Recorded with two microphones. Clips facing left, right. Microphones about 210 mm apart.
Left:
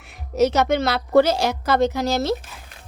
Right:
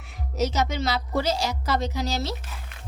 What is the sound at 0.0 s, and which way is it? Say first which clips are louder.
A woman's voice: left 8 dB; 60° left (ahead or behind).